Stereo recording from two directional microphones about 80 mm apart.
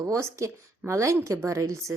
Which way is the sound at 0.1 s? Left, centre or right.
Right.